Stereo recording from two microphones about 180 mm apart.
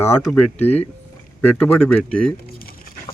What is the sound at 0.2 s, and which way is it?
Speech, 5° left (ahead or behind).